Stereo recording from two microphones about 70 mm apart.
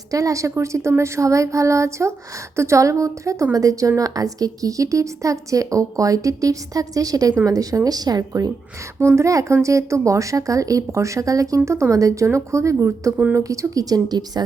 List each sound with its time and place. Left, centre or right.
0.1 s speech: right
9.1 s speech: right